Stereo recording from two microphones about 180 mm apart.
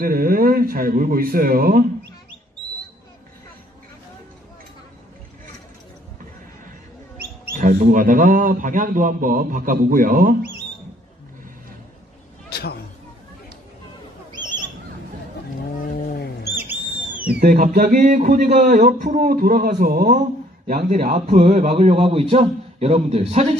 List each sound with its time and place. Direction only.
0.0 s a man's voice: 55° right (ahead or behind)
7.5 s a man's voice: 45° right (ahead or behind)
12.4 s a sound: 60° left (ahead or behind)
16.1 s bird: 60° left (ahead or behind)
17.4 s a man's voice: 50° right (ahead or behind)